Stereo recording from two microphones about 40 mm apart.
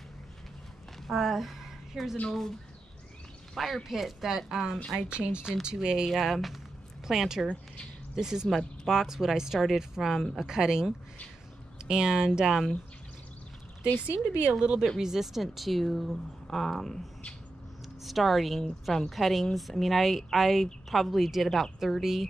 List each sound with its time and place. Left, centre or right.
1.0 s a woman's voice: centre
2.2 s speech: centre
3.5 s speech: centre
4.9 s speech: right
6.1 s speech: centre
8.5 s speech: centre
14.6 s speech: centre
18.0 s speech: centre